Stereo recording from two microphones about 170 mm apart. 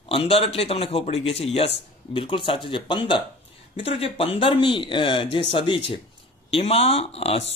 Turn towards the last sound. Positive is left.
turn(degrees=35)  # may be behind; listen again after turning